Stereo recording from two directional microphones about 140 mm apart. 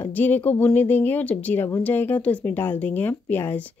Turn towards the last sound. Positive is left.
turn(degrees=15)  # may be behind; listen again after turning